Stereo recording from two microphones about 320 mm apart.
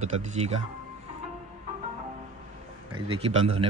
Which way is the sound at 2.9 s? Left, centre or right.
Centre.